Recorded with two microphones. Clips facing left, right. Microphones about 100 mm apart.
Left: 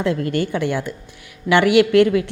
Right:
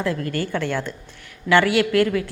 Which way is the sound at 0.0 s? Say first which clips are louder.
Left 4 dB; 20° left (ahead or behind).